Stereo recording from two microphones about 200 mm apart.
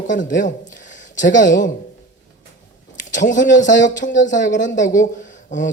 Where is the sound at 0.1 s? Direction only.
40° left (ahead or behind).